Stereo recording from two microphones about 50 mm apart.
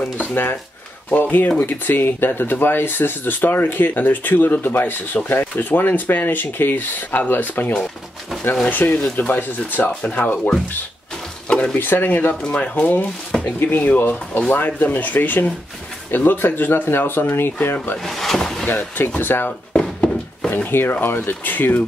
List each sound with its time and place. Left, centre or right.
0.2 s speech: left
10.0 s speech: left
11.4 s stir: left
11.8 s speech: left
18.0 s a sound: centre
18.7 s speech: left
19.7 s a sound: centre
20.7 s speech: left